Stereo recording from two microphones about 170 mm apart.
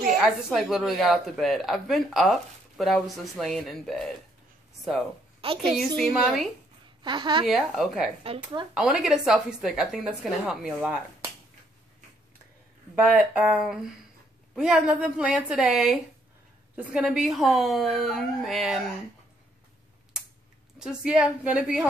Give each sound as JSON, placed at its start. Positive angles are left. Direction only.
{"t": 0.2, "sound": "a woman's voice", "side_deg": -5}
{"t": 5.6, "sound": "a woman's voice", "side_deg": 0}
{"t": 7.0, "sound": "a woman's voice", "side_deg": -25}
{"t": 7.4, "sound": "a woman's voice", "side_deg": 0}
{"t": 13.0, "sound": "a woman's voice", "side_deg": -5}
{"t": 20.8, "sound": "a woman's voice", "side_deg": -5}